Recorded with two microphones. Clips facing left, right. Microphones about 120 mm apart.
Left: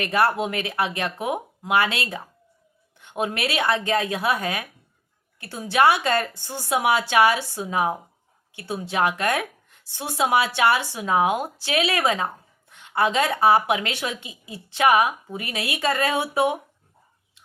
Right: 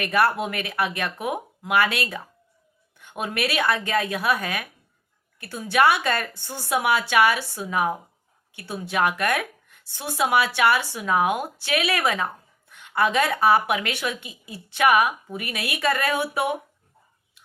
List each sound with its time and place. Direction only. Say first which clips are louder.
0.0 s speech: even; 25° left (ahead or behind)